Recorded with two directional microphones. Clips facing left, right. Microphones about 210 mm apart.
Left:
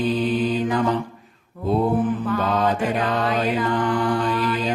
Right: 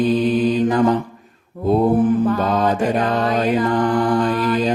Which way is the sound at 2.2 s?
40° right (ahead or behind).